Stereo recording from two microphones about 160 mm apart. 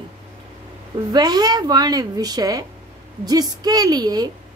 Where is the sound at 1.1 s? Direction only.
25° right (ahead or behind).